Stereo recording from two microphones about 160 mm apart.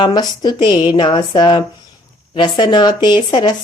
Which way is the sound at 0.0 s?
25° left (ahead or behind).